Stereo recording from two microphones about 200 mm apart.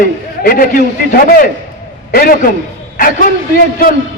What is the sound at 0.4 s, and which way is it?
A man's voice, 45° left (ahead or behind).